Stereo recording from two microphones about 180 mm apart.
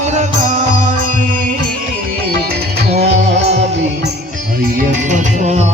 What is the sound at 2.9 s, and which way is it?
Music, 40° right (ahead or behind).